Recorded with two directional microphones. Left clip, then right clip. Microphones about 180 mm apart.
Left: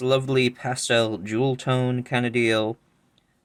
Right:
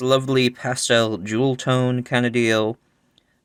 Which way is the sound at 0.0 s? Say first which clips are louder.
Right 3 dB; 30° right (ahead or behind).